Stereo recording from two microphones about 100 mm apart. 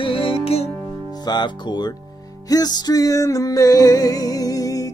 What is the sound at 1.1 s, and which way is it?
Speech, 45° left (ahead or behind).